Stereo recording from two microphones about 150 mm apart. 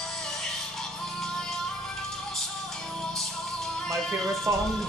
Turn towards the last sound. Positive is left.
turn(degrees=-20)  # may be behind; listen again after turning